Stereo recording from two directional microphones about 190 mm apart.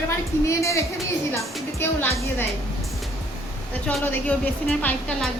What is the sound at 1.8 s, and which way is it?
Speech, 10° left (ahead or behind).